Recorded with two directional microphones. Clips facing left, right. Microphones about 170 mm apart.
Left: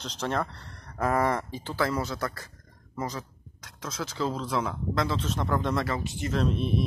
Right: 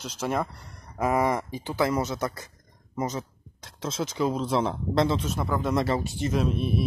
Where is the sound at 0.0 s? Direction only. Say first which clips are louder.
Right 2 dB; 10° right (ahead or behind); by 5.2 s 25° right (ahead or behind).